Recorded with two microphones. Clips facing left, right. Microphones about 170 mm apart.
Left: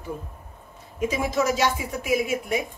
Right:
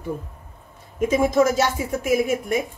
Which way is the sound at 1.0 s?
50° right (ahead or behind).